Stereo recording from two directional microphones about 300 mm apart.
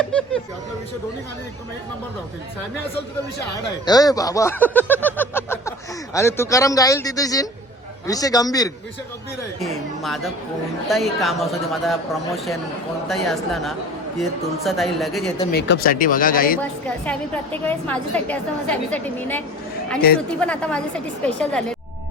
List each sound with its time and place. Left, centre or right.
0.0 s speech: centre
3.8 s speech: centre
10.0 s a woman's voice: centre
15.5 s speech: left
17.1 s a woman's voice: centre
20.4 s a woman's voice: centre